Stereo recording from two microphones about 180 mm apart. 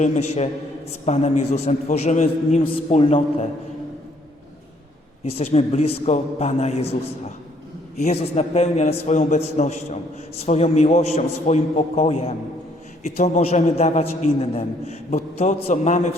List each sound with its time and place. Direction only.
0.0 s a man's voice: 40° left (ahead or behind)
5.2 s a man's voice: 35° left (ahead or behind)